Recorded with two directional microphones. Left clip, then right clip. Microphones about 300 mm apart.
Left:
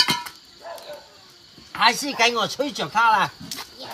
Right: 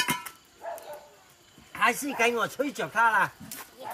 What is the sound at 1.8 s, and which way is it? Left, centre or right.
Speech, centre.